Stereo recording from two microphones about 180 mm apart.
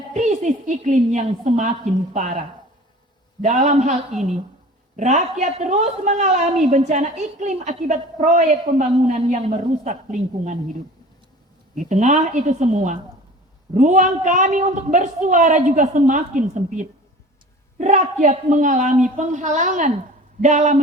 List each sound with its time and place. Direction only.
0.1 s a woman's voice: 40° right (ahead or behind)
3.6 s a woman's voice: 40° right (ahead or behind)
4.9 s a woman's voice: 40° right (ahead or behind)
11.7 s a woman's voice: 45° right (ahead or behind)